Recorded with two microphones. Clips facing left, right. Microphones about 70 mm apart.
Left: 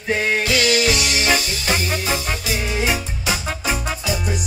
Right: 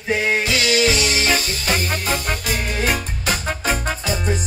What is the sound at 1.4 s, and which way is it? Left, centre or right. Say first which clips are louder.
Music: even; right.